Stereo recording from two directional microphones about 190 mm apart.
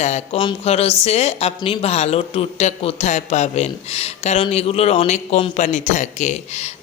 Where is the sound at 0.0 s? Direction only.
35° left (ahead or behind).